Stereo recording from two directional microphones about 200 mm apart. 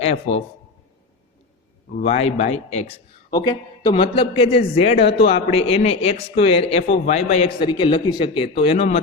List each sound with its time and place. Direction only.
2.0 s a man's voice: 30° left (ahead or behind)